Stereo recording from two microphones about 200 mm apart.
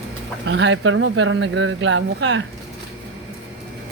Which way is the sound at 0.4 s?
65° right (ahead or behind).